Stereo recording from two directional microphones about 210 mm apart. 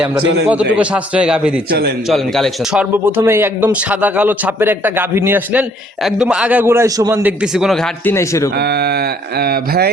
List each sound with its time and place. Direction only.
0.4 s a man's voice: 5° right (ahead or behind)
3.2 s a man's voice: 10° right (ahead or behind)
8.0 s a man's voice: 15° left (ahead or behind)
8.5 s speech: 50° right (ahead or behind)